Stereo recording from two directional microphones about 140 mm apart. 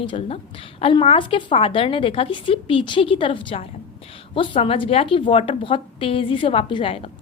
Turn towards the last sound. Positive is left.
turn(degrees=40)  # may be behind; listen again after turning